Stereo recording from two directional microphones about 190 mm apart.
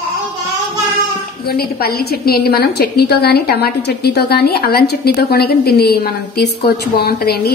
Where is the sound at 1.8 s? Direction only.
55° left (ahead or behind).